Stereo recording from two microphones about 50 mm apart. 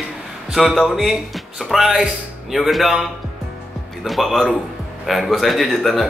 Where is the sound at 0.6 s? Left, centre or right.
Centre.